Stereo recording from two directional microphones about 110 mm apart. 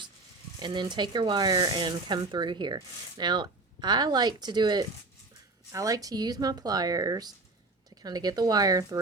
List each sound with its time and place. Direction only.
0.6 s speech: 45° right (ahead or behind)